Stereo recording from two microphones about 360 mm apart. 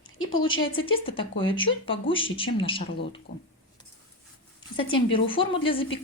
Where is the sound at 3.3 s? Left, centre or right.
Left.